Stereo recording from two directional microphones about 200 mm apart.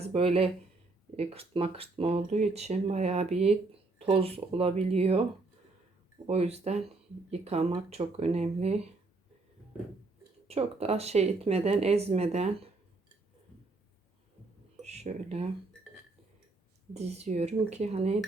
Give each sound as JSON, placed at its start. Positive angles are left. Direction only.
{"t": 0.0, "sound": "speech", "side_deg": -30}
{"t": 6.2, "sound": "speech", "side_deg": -30}
{"t": 10.5, "sound": "speech", "side_deg": -30}
{"t": 14.8, "sound": "speech", "side_deg": -35}
{"t": 16.9, "sound": "speech", "side_deg": -35}